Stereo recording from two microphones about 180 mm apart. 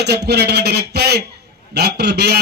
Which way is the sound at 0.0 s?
65° right (ahead or behind).